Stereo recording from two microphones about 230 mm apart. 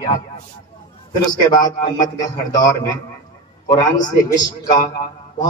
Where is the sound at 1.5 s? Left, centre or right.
Centre.